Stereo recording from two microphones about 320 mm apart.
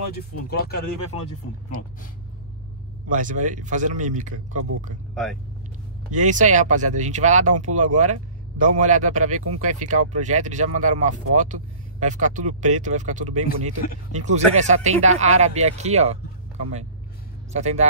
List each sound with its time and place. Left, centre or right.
3.1 s speech: right
5.1 s speech: centre
6.1 s speech: right
13.2 s speech: right
14.1 s speech: right
17.5 s speech: right